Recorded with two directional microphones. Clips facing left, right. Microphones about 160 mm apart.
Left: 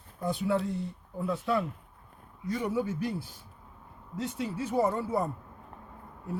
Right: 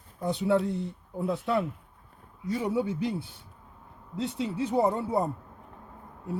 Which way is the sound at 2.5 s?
20° right (ahead or behind).